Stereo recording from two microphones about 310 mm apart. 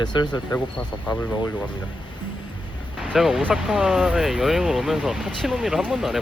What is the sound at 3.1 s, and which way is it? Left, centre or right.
Speech, centre.